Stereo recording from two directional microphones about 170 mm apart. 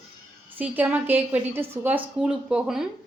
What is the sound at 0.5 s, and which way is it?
Speech, 10° right (ahead or behind).